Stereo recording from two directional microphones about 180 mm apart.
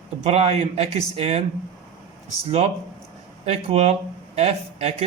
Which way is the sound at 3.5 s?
35° right (ahead or behind).